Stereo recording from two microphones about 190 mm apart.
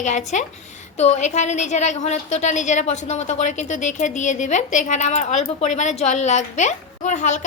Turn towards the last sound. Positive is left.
turn(degrees=40)  # may be behind; listen again after turning